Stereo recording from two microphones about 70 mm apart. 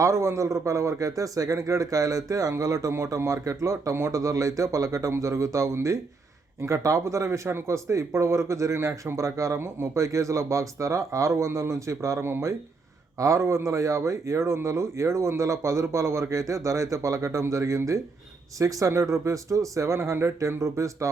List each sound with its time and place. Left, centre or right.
0.0 s speech: right